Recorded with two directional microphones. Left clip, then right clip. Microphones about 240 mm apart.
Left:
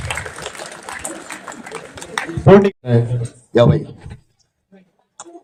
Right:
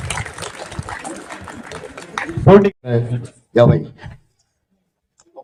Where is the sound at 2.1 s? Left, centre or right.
Left.